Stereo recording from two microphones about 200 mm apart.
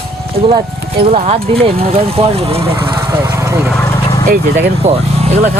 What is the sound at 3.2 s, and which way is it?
Vehicle, 15° right (ahead or behind).